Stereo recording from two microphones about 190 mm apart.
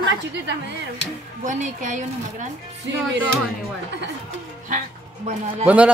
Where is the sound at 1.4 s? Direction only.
40° right (ahead or behind).